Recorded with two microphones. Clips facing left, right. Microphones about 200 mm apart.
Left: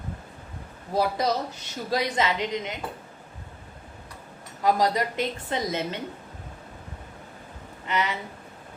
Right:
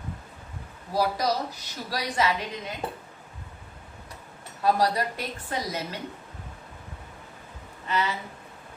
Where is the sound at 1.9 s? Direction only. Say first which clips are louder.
Left 2 dB; 25° left (ahead or behind).